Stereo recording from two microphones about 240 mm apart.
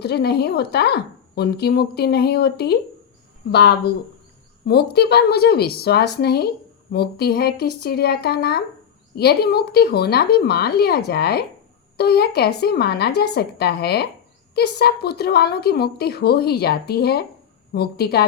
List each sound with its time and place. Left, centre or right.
0.0 s a woman's voice: left